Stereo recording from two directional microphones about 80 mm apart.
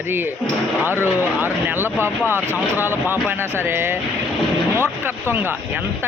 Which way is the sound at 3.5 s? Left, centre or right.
Right.